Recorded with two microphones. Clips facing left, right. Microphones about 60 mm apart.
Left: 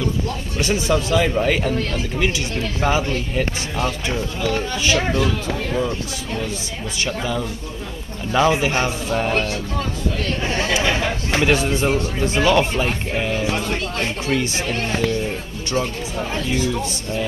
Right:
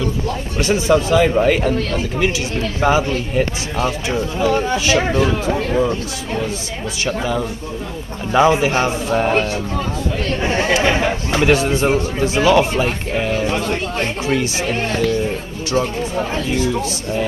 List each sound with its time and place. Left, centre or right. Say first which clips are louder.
0.7 s speech: right 5 dB; centre
4.4 s speech: right 7 dB; right
10.4 s chatter: right 5 dB; centre
11.4 s speech: right 4 dB; centre